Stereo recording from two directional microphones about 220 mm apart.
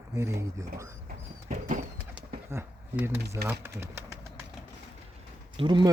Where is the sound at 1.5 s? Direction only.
35° right (ahead or behind).